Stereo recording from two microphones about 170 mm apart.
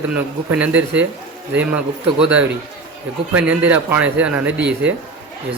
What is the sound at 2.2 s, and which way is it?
A man's voice, 5° right (ahead or behind).